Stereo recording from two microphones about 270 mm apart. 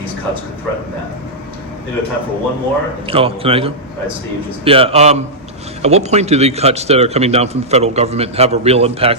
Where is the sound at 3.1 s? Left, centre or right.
Right.